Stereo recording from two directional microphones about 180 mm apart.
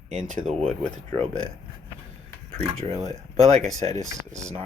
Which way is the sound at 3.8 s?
35° right (ahead or behind).